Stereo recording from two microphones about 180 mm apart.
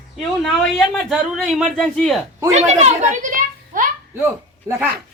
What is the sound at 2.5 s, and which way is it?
Speech, 40° right (ahead or behind).